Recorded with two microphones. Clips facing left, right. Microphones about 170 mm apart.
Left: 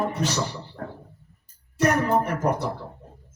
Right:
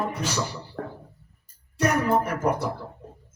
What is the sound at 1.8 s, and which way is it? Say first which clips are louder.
Speech: left 1 dB; 10° right (ahead or behind).